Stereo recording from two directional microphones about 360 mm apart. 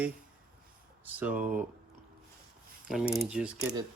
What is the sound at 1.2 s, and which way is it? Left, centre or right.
Speech, centre.